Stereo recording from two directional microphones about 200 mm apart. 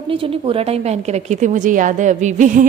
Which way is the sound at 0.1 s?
25° right (ahead or behind).